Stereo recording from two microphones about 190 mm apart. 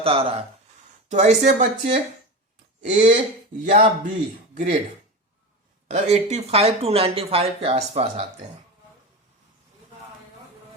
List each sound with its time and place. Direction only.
0.0 s speech: 30° right (ahead or behind)
5.9 s speech: 35° right (ahead or behind)